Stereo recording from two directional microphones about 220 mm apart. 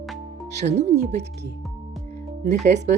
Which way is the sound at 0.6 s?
30° right (ahead or behind).